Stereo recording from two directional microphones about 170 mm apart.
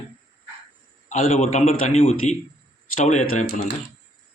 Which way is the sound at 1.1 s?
40° left (ahead or behind).